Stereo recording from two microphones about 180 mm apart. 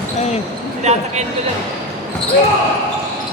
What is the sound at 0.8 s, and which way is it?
Speech, 40° right (ahead or behind).